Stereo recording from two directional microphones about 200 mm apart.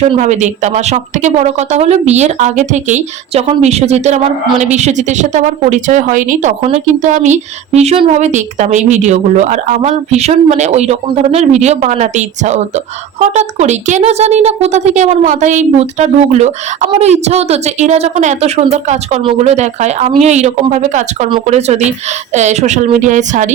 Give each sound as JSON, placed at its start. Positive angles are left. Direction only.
{"t": 0.2, "sound": "a woman's voice", "side_deg": -35}